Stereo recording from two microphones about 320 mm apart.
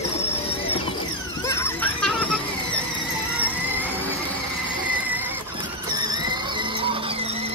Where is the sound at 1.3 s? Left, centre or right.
Centre.